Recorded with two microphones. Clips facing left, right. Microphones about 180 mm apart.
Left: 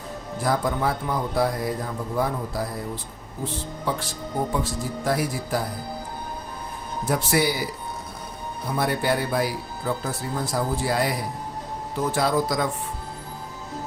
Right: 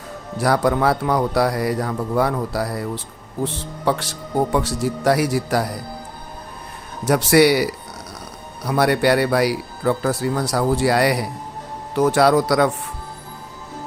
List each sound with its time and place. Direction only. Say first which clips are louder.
0.3 s speech: right 6 dB; 75° right (ahead or behind)
7.0 s speech: right 8 dB; 80° right